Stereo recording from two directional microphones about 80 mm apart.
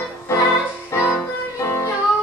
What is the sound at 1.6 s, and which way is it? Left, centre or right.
Music, left.